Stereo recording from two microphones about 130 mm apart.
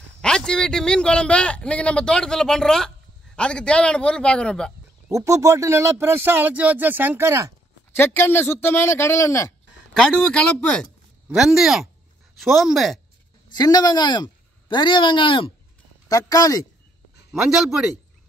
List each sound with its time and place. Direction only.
0.2 s a man's voice: 5° left (ahead or behind)
5.1 s speech: 25° right (ahead or behind)
7.9 s a man's voice: 15° left (ahead or behind)
9.9 s speech: 5° left (ahead or behind)
11.2 s speech: 5° right (ahead or behind)
13.5 s speech: 30° left (ahead or behind)
16.1 s speech: 30° left (ahead or behind)
17.3 s speech: 5° right (ahead or behind)